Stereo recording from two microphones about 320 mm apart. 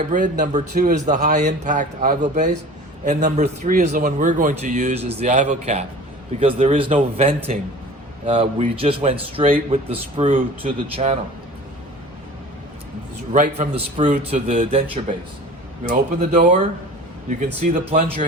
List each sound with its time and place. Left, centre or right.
0.1 s a man's voice: right
13.3 s a man's voice: right
17.8 s a man's voice: right